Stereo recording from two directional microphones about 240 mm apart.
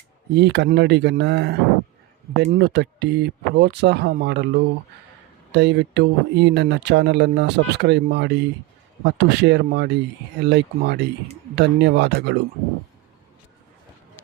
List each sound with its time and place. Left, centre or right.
0.3 s speech: right